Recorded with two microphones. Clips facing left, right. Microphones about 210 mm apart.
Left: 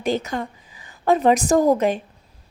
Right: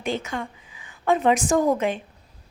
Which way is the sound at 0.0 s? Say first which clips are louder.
Left 4 dB; 40° left (ahead or behind).